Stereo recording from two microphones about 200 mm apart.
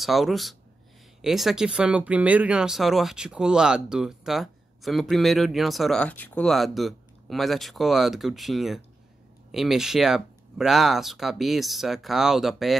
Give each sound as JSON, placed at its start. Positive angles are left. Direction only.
{"t": 0.0, "sound": "speech", "side_deg": 0}